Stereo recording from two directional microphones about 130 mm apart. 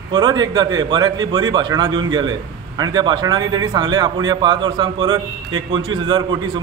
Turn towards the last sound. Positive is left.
turn(degrees=-35)  # may be behind; listen again after turning